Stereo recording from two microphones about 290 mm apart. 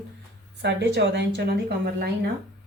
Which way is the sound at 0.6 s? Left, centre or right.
Right.